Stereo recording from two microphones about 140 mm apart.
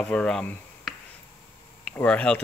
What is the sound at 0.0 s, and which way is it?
Speech, 5° left (ahead or behind).